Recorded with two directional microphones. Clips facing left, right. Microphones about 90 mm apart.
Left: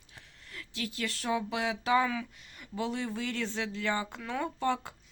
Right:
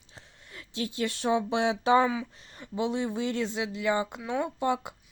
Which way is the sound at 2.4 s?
30° right (ahead or behind).